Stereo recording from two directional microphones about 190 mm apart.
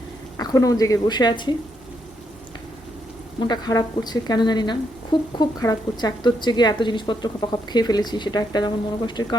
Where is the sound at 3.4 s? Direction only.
20° left (ahead or behind).